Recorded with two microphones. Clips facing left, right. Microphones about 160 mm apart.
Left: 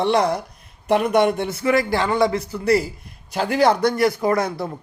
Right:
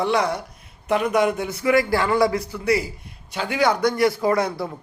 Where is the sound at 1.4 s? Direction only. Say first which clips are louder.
Even; 25° left (ahead or behind).